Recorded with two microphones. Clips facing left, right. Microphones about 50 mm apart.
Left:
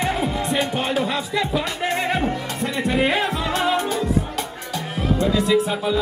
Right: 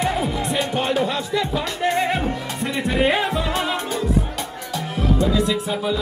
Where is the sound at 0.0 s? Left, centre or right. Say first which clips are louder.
Even; left.